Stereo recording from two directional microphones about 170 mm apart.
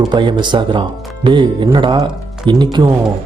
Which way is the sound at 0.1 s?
25° right (ahead or behind).